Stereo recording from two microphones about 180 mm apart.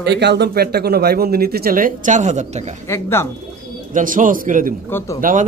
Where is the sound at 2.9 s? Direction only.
15° left (ahead or behind).